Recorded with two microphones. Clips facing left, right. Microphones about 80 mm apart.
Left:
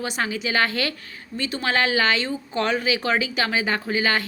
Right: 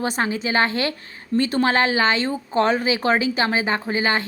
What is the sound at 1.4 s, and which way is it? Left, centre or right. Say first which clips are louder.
Speech: right 4 dB; right.